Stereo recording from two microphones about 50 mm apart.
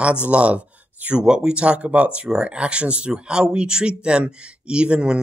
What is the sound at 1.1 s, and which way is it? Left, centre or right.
Speech, centre.